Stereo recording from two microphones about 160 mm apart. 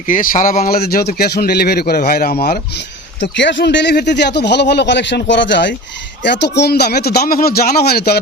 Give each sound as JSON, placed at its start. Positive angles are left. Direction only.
{"t": 0.1, "sound": "speech", "side_deg": 55}
{"t": 3.2, "sound": "speech", "side_deg": 90}